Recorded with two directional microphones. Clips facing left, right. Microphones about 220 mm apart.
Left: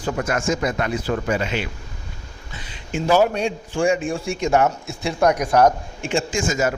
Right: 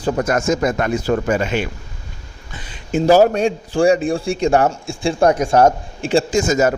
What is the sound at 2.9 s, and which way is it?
A man's voice, 40° right (ahead or behind).